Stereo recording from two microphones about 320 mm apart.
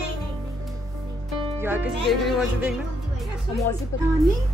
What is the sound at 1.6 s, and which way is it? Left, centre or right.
Speech, centre.